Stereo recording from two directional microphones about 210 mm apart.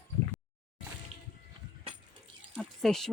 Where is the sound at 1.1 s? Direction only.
30° right (ahead or behind).